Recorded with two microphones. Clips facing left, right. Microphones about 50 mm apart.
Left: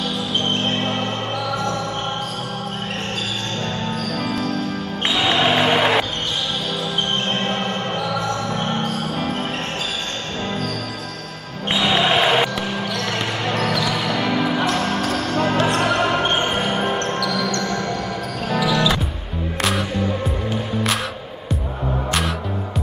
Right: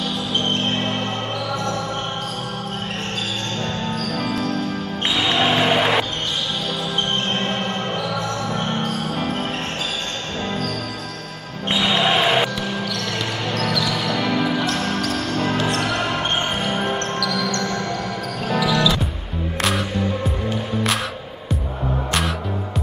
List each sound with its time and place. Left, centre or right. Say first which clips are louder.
0.7 s music: left 1 dB; centre
3.6 s music: even; centre
5.0 s music: left 1 dB; centre
7.2 s music: left 1 dB; centre
11.7 s basketball bounce: left 1 dB; centre
15.1 s music: left 2 dB; centre
15.5 s basketball bounce: left 3 dB; left
18.5 s basketball bounce: even; centre
19.6 s music: even; centre